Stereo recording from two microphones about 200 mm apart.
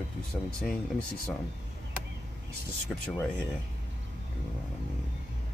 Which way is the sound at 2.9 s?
Centre (ahead or behind).